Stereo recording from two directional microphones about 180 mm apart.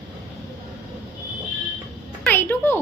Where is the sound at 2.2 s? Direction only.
10° left (ahead or behind).